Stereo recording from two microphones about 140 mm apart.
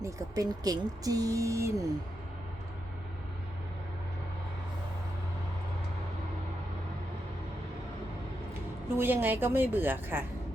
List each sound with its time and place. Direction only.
0.0 s speech: 25° right (ahead or behind)
9.0 s a woman's voice: 15° right (ahead or behind)